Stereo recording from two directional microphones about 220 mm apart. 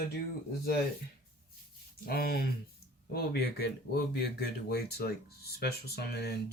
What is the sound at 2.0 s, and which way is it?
Speech, 45° left (ahead or behind).